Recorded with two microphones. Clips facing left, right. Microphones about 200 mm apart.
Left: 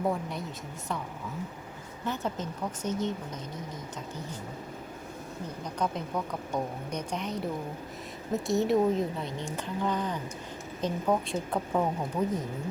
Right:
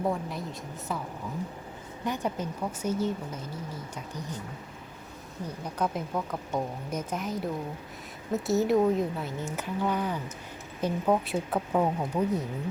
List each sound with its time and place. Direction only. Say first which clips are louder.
0.1 s a woman's voice: even; centre (ahead or behind)
2.0 s a woman's voice: right 2 dB; 15° right (ahead or behind)
5.8 s a woman's voice: right 1 dB; 5° right (ahead or behind)